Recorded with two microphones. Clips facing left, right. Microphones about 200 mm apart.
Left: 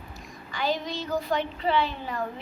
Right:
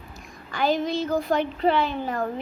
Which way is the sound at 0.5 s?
50° right (ahead or behind).